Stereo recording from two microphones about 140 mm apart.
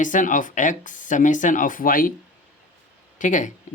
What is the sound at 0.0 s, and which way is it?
Speech, 65° left (ahead or behind).